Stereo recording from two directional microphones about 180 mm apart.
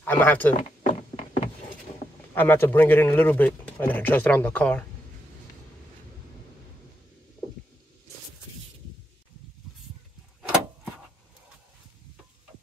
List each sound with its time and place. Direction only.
0.0 s speech: 10° left (ahead or behind)
0.7 s a sound: 35° left (ahead or behind)
2.3 s speech: 10° left (ahead or behind)